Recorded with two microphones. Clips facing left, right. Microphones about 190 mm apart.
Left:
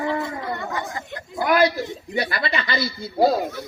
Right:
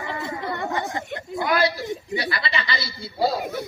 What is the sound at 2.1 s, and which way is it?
Speech, 50° left (ahead or behind).